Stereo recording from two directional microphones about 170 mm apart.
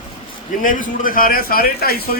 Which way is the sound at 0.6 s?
50° left (ahead or behind).